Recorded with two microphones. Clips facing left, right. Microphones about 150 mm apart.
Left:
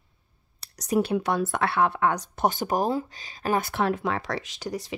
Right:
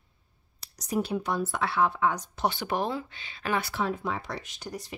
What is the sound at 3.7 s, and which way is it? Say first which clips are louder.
Speech: left 5 dB; 80° left.